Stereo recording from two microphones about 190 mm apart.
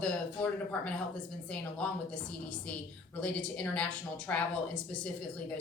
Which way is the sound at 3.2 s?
5° left (ahead or behind).